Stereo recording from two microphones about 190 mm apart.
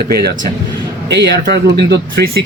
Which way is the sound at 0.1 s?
55° right (ahead or behind).